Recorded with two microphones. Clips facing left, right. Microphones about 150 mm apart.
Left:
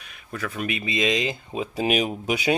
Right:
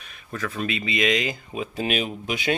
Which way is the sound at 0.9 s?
20° left (ahead or behind).